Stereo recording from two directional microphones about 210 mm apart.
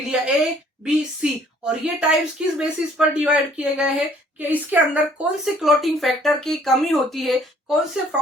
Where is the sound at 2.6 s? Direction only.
5° right (ahead or behind).